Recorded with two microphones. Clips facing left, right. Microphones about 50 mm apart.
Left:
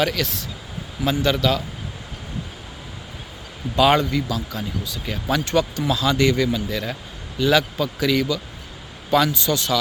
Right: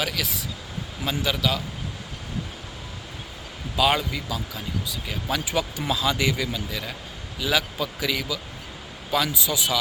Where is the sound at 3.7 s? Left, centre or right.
Centre.